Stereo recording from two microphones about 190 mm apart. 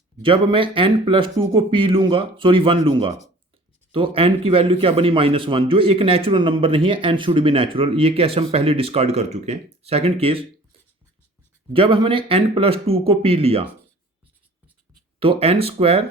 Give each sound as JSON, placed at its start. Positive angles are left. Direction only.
{"t": 0.2, "sound": "a man's voice", "side_deg": -25}
{"t": 11.7, "sound": "a man's voice", "side_deg": -25}
{"t": 15.2, "sound": "speech", "side_deg": -30}